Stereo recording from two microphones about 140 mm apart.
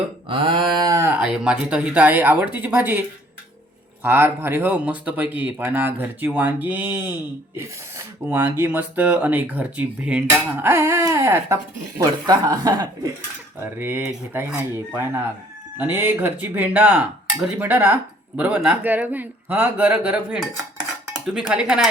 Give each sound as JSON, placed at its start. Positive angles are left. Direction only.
{"t": 0.3, "sound": "a sound", "side_deg": -35}
{"t": 0.9, "sound": "speech", "side_deg": -20}
{"t": 4.0, "sound": "speech", "side_deg": -15}
{"t": 13.6, "sound": "speech", "side_deg": -15}